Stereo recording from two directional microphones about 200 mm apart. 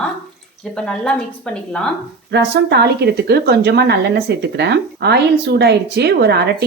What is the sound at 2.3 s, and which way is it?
A woman's voice, 60° right (ahead or behind).